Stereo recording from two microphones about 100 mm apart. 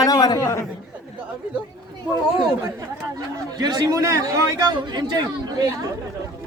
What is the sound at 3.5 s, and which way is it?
A man's voice, 45° right (ahead or behind).